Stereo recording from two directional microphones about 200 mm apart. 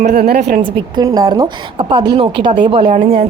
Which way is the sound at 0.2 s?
50° right (ahead or behind).